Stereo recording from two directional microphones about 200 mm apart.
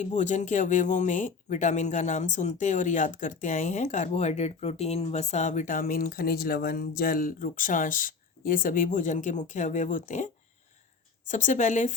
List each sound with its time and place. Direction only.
0.0 s speech: 35° left (ahead or behind)
11.3 s speech: 40° left (ahead or behind)